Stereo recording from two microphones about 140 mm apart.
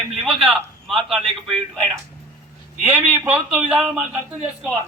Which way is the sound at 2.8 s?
10° right (ahead or behind).